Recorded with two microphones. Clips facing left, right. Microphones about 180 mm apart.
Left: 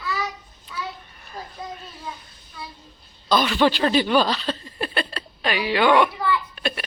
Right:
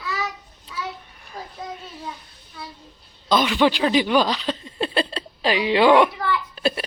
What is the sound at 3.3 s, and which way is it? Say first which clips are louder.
Speech: right 1 dB; 15° right (ahead or behind).